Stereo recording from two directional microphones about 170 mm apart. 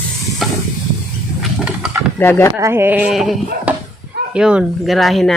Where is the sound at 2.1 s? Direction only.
10° left (ahead or behind).